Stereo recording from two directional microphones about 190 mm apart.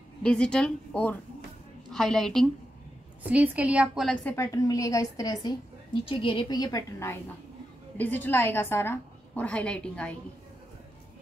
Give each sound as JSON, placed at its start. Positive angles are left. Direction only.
{"t": 0.2, "sound": "a woman's voice", "side_deg": 5}